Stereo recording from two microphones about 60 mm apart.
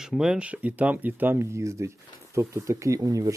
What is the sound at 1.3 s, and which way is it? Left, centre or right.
Speech, right.